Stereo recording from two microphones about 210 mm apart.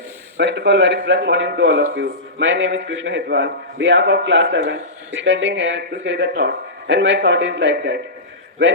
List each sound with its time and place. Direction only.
0.3 s a man's voice: 55° right (ahead or behind)